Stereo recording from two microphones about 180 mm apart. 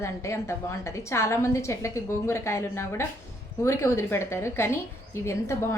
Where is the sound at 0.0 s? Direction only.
15° left (ahead or behind).